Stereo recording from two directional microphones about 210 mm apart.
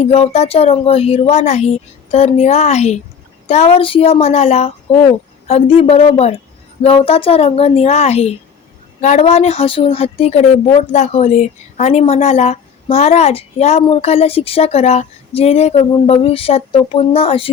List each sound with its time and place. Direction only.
0.0 s a woman's voice: 30° left (ahead or behind)